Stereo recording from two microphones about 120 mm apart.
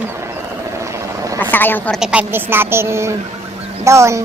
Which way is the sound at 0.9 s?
30° right (ahead or behind).